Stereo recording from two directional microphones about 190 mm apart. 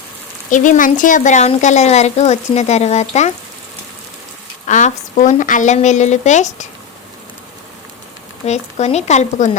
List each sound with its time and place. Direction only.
0.5 s a woman's voice: 40° left (ahead or behind)
4.6 s a woman's voice: 40° left (ahead or behind)
8.4 s a woman's voice: 35° left (ahead or behind)